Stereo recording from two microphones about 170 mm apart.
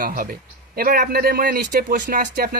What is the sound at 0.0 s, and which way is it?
Speech, 55° right (ahead or behind).